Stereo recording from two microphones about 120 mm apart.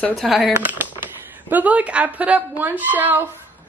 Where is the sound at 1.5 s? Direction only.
10° right (ahead or behind).